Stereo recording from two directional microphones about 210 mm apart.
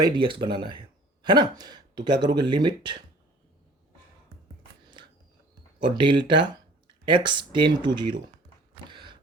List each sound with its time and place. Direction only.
0.0 s speech: 25° right (ahead or behind)
5.8 s speech: 25° right (ahead or behind)
8.9 s a sound: 20° right (ahead or behind)